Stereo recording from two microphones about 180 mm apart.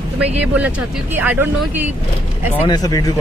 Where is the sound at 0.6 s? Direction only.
5° right (ahead or behind).